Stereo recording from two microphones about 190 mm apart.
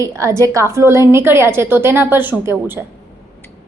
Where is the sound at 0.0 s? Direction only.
15° right (ahead or behind).